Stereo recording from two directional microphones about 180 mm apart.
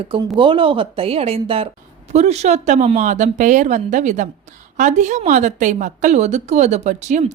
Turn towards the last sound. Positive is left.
turn(degrees=-40)  # may be behind; listen again after turning